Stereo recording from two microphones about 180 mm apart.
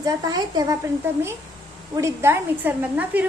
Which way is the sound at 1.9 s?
15° right (ahead or behind).